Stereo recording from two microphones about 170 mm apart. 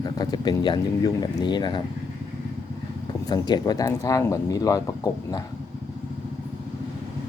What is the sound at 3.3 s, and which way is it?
Speech, 25° left (ahead or behind).